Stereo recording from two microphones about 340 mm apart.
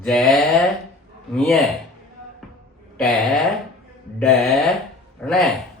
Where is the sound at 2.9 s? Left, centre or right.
Centre.